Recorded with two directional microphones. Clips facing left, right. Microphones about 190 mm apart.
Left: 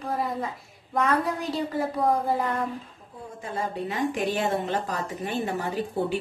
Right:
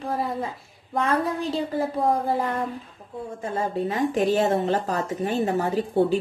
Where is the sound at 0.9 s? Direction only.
25° right (ahead or behind).